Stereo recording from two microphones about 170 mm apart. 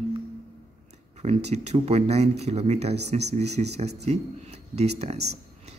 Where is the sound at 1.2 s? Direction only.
40° right (ahead or behind).